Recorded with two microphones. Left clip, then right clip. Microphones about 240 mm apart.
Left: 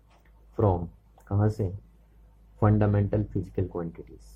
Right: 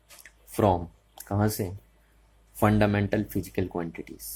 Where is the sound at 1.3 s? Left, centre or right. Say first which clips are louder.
Right 2 dB; right.